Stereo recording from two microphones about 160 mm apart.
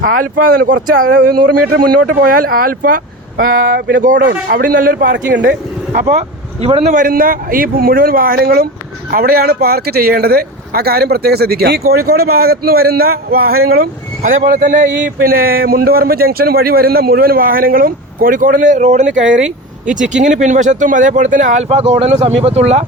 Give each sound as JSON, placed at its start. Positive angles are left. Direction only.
{"t": 0.0, "sound": "speech", "side_deg": -60}
{"t": 4.0, "sound": "speech", "side_deg": -60}
{"t": 6.1, "sound": "speech", "side_deg": -40}
{"t": 6.9, "sound": "speech", "side_deg": -60}
{"t": 19.4, "sound": "a sound", "side_deg": -5}
{"t": 19.9, "sound": "speech", "side_deg": -50}